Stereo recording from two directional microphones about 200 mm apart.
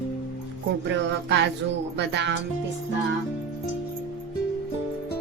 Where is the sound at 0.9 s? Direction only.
60° right (ahead or behind).